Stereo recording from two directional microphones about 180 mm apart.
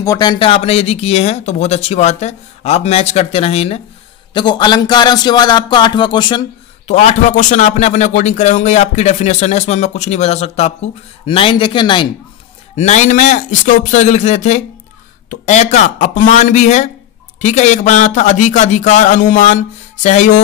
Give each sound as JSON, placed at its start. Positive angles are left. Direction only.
{"t": 0.0, "sound": "speech", "side_deg": 20}
{"t": 6.9, "sound": "speech", "side_deg": 40}
{"t": 12.7, "sound": "speech", "side_deg": 40}